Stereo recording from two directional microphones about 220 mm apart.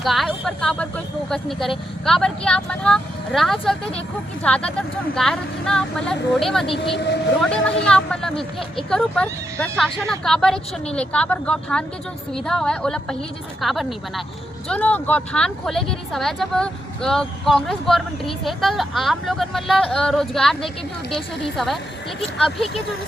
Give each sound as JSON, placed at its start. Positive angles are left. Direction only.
{"t": 0.0, "sound": "speech", "side_deg": 0}
{"t": 6.9, "sound": "speech", "side_deg": 50}
{"t": 7.4, "sound": "speech", "side_deg": 5}